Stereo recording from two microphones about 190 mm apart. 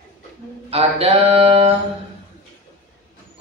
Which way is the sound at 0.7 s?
30° right (ahead or behind).